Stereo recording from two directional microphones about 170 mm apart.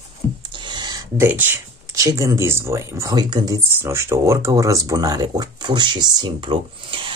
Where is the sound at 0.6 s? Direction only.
25° right (ahead or behind).